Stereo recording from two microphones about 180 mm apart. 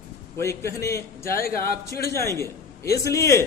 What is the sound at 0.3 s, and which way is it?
A man's voice, 15° left (ahead or behind).